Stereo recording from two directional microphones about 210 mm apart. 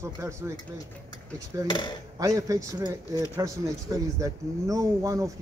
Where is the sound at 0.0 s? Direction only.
15° right (ahead or behind).